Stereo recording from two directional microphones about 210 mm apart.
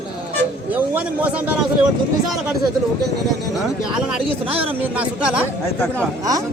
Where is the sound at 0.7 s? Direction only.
5° right (ahead or behind).